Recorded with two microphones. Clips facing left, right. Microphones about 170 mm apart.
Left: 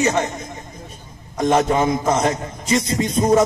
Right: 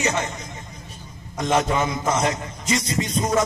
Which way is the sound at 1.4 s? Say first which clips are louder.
Left 4 dB; 45° left (ahead or behind).